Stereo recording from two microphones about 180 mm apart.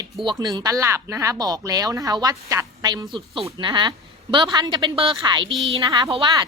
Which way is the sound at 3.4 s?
25° right (ahead or behind).